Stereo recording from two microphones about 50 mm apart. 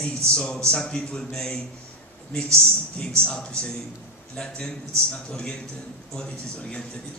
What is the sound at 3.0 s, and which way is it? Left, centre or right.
A man's voice, centre.